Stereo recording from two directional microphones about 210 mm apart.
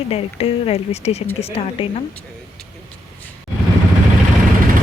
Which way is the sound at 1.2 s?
10° left (ahead or behind).